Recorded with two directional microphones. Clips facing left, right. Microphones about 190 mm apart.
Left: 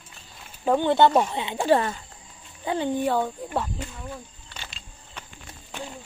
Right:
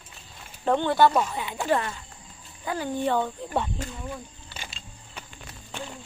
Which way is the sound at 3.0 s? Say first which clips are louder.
Left 1 dB; 10° left (ahead or behind).